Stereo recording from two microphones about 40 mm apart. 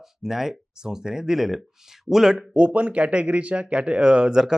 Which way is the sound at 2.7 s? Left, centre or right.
Right.